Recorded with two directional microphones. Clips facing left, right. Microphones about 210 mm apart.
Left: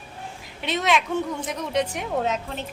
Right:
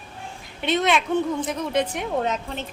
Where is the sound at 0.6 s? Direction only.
Centre (ahead or behind).